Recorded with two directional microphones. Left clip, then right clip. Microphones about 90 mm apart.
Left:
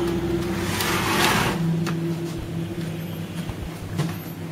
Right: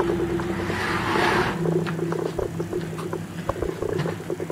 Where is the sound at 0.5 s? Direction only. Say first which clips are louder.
Left 1 dB; 35° left (ahead or behind).